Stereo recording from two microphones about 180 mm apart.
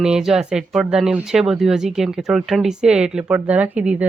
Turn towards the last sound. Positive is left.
turn(degrees=-10)  # may be behind; listen again after turning